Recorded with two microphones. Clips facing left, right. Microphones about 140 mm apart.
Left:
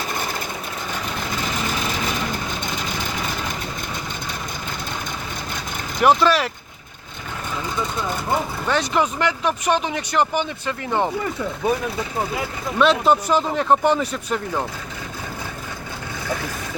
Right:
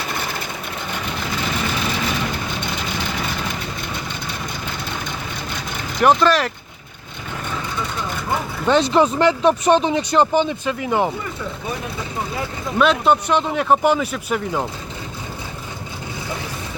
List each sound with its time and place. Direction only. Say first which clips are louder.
1.9 s vehicle: right 2 dB; 45° left (ahead or behind)
6.0 s speech: right 1 dB; 5° left (ahead or behind)
8.6 s speech: right 8 dB; 25° right (ahead or behind)
12.8 s speech: even; centre (ahead or behind)